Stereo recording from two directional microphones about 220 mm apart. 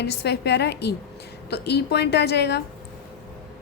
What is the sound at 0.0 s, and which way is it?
A woman's voice, 50° left (ahead or behind).